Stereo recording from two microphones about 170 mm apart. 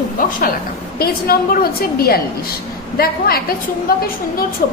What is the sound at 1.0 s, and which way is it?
A woman's voice, 65° left (ahead or behind).